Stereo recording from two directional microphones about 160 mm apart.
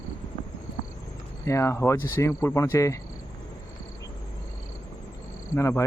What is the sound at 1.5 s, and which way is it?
Speech, 15° left (ahead or behind).